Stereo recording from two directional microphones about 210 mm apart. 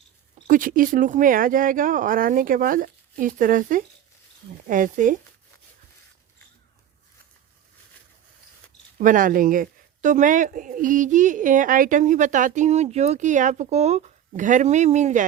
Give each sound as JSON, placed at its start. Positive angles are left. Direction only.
{"t": 0.4, "sound": "a woman's voice", "side_deg": -40}
{"t": 9.0, "sound": "a woman's voice", "side_deg": -40}